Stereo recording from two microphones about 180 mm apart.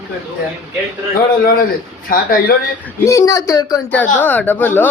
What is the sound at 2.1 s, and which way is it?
Speech, 55° left (ahead or behind).